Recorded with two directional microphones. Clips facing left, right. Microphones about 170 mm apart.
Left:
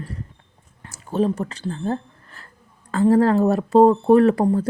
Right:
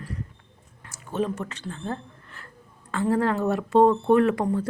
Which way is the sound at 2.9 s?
35° left (ahead or behind).